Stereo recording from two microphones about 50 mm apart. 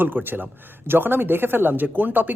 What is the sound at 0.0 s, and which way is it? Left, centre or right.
Speech, right.